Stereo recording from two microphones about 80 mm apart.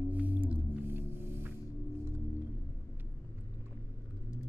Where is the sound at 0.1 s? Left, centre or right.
Right.